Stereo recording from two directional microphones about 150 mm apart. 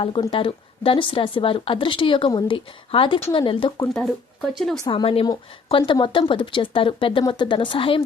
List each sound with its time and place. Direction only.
0.0 s speech: 35° left (ahead or behind)
4.0 s speech: centre (ahead or behind)
4.9 s speech: 35° left (ahead or behind)